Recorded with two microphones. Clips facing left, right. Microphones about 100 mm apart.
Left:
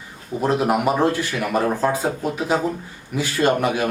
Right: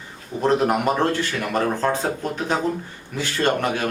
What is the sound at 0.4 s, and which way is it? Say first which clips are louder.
A man's voice: even; 5° left (ahead or behind).